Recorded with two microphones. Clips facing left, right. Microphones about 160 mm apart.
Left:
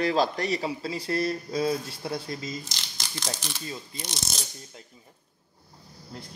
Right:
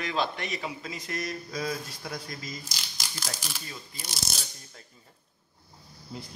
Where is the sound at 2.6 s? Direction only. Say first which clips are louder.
Left 1 dB; 10° right (ahead or behind).